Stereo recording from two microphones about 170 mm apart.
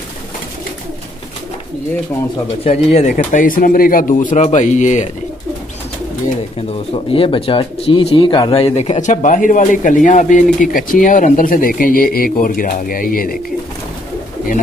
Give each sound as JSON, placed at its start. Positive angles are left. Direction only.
{"t": 2.6, "sound": "speech", "side_deg": 40}
{"t": 3.3, "sound": "speech", "side_deg": 55}
{"t": 6.7, "sound": "speech", "side_deg": 35}